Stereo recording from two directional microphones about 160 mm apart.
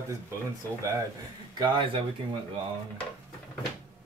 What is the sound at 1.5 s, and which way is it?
Speech, 30° right (ahead or behind).